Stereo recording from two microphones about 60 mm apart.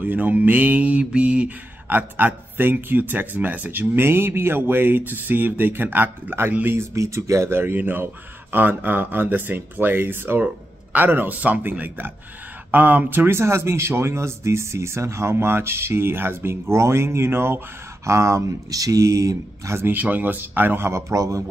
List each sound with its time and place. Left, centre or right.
0.0 s speech: right
1.9 s speech: right
18.0 s speech: right
19.8 s speech: right
21.1 s a man's voice: right